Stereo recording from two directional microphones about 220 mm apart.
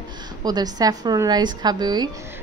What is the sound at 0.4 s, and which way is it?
A woman's voice, 20° right (ahead or behind).